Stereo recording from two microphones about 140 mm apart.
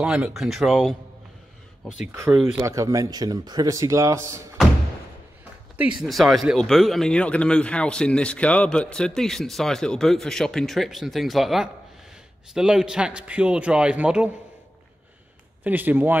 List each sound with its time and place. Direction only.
0.0 s speech: 5° right (ahead or behind)
2.4 s speech: 20° right (ahead or behind)
6.0 s a man's voice: centre (ahead or behind)
15.6 s a man's voice: 15° right (ahead or behind)